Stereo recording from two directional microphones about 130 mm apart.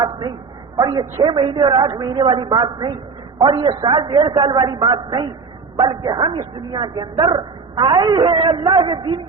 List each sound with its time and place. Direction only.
0.8 s speech: 30° right (ahead or behind)